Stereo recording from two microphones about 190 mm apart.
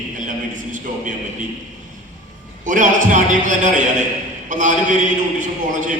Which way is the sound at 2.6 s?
40° right (ahead or behind).